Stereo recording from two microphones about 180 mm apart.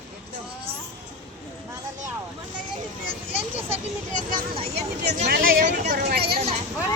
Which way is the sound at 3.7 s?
40° right (ahead or behind).